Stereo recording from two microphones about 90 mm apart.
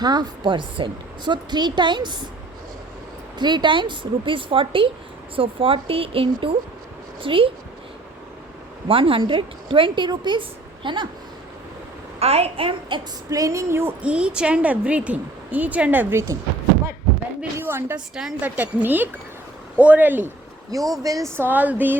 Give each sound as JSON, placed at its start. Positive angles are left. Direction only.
{"t": 0.0, "sound": "a woman's voice", "side_deg": -50}
{"t": 3.3, "sound": "a woman's voice", "side_deg": -55}
{"t": 7.2, "sound": "a woman's voice", "side_deg": -80}
{"t": 8.9, "sound": "a woman's voice", "side_deg": -80}
{"t": 12.5, "sound": "a woman's voice", "side_deg": -85}
{"t": 13.3, "sound": "speech", "side_deg": -40}
{"t": 14.0, "sound": "a woman's voice", "side_deg": -10}
{"t": 17.4, "sound": "a woman's voice", "side_deg": -25}
{"t": 18.1, "sound": "a woman's voice", "side_deg": -10}
{"t": 20.7, "sound": "speech", "side_deg": -40}
{"t": 21.3, "sound": "a woman's voice", "side_deg": -20}